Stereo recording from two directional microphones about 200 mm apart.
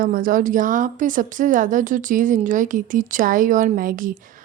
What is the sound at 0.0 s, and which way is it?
A woman's voice, 45° right (ahead or behind).